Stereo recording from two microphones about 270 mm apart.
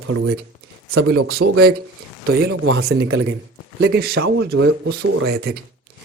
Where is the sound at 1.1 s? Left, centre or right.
Right.